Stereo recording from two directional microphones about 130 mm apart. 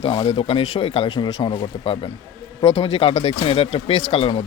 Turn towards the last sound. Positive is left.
turn(degrees=50)  # may be behind; listen again after turning